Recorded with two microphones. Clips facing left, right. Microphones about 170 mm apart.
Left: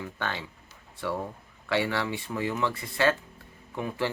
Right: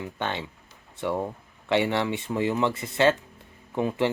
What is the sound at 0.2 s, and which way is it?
Speech, 20° right (ahead or behind).